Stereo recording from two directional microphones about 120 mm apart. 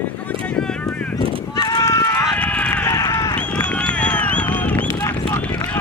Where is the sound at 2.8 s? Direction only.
30° left (ahead or behind).